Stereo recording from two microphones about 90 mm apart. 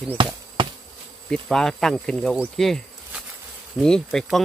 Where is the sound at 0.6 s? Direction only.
70° right (ahead or behind).